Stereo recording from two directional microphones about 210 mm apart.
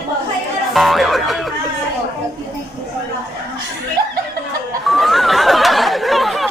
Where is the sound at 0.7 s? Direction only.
Centre (ahead or behind).